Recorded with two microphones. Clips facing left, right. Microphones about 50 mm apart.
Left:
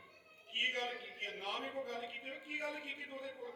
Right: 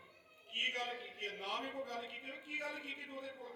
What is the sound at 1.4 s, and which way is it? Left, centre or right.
A man's voice, left.